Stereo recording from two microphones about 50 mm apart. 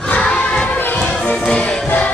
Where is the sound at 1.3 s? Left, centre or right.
Centre.